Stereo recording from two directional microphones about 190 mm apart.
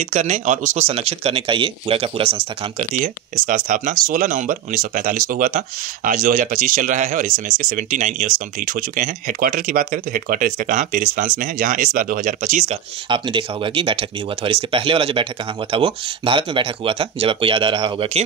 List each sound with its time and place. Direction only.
0.0 s speech: 40° right (ahead or behind)
3.4 s speech: 45° right (ahead or behind)
13.1 s speech: 25° right (ahead or behind)